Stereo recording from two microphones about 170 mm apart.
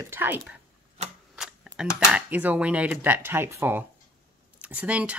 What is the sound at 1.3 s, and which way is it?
Camera, 5° right (ahead or behind).